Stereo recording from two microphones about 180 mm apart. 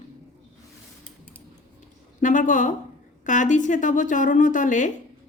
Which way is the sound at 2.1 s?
45° left (ahead or behind).